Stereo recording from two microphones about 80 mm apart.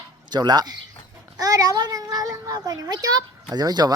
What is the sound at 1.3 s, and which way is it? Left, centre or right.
A child's voice, right.